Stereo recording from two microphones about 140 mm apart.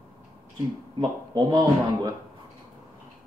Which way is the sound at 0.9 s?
30° right (ahead or behind).